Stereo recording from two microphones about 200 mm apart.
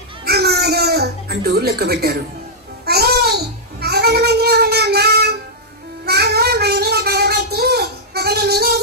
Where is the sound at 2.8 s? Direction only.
50° right (ahead or behind).